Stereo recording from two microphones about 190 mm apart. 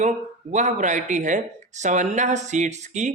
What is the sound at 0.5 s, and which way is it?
Speech, 40° right (ahead or behind).